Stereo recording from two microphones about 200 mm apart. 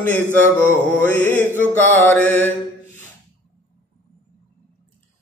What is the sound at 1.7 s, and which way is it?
Music, 10° left (ahead or behind).